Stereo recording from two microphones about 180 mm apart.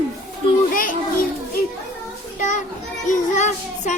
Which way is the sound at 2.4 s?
45° left (ahead or behind).